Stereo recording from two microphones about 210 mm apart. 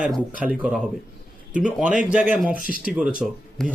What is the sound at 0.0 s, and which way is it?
Speech, centre (ahead or behind).